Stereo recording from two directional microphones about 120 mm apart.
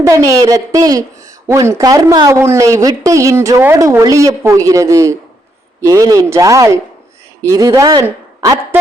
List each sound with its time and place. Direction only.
0.0 s a woman's voice: 25° right (ahead or behind)